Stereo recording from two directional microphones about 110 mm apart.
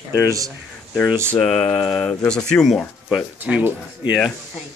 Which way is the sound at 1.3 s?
10° left (ahead or behind).